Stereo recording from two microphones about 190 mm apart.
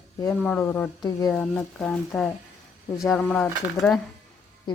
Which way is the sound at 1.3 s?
5° left (ahead or behind).